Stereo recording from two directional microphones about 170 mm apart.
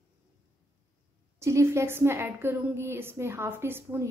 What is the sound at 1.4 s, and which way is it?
A woman's voice, 15° right (ahead or behind).